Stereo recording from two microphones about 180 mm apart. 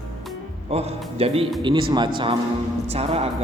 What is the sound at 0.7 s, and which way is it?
A man's voice, 35° right (ahead or behind).